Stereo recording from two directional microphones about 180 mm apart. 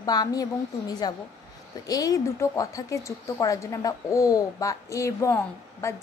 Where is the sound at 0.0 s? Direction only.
20° left (ahead or behind).